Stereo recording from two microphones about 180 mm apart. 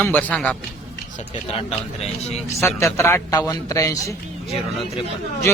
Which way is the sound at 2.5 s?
15° left (ahead or behind).